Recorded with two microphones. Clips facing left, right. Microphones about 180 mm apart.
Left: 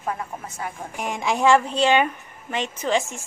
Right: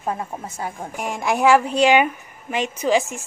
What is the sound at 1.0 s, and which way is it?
Speech, 5° right (ahead or behind).